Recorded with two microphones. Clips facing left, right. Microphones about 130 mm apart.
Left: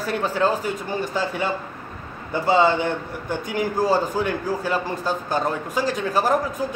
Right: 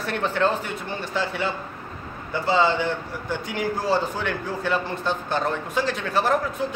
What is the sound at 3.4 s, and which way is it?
Speech, 45° left (ahead or behind).